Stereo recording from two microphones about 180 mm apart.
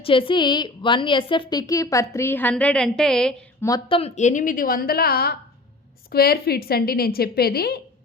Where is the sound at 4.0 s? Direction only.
40° left (ahead or behind); by 7.8 s 60° left (ahead or behind).